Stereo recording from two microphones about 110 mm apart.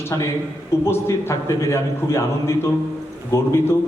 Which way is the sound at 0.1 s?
30° left (ahead or behind).